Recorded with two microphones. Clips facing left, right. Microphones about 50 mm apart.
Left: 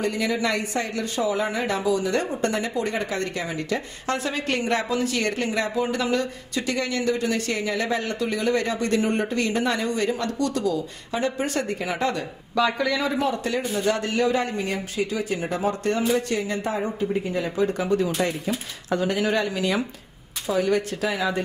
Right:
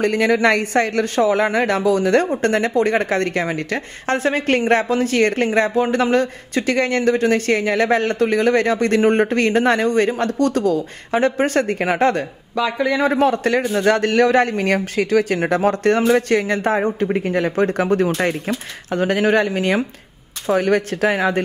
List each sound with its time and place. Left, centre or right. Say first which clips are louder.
0.0 s a man's voice: right 8 dB; right
13.2 s a man's voice: right 8 dB; right
16.0 s speech: right 7 dB; right
16.3 s a man's voice: right 8 dB; right